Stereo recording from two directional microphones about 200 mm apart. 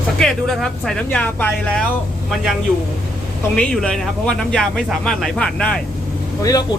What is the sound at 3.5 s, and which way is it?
Speech, 5° left (ahead or behind).